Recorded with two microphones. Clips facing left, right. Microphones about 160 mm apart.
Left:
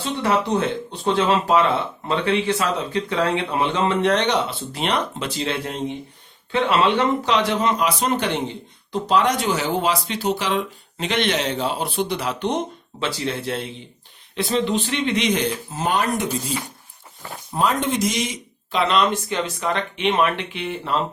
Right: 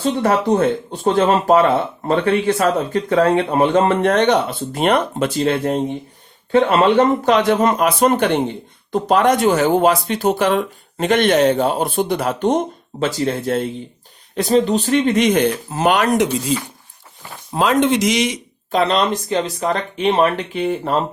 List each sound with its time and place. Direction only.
0.2 s speech: 50° right (ahead or behind); by 16.4 s 90° right
17.5 s speech: 90° right
18.7 s speech: 40° right (ahead or behind)